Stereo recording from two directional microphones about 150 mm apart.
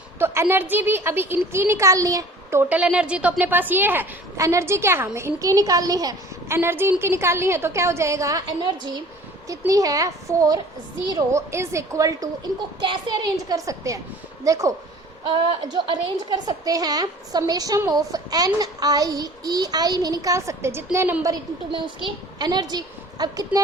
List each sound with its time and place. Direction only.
0.2 s a woman's voice: 15° right (ahead or behind)
12.8 s a woman's voice: 30° right (ahead or behind)
15.3 s a woman's voice: 35° right (ahead or behind); by 21.2 s 15° right (ahead or behind)
21.7 s a woman's voice: 30° right (ahead or behind)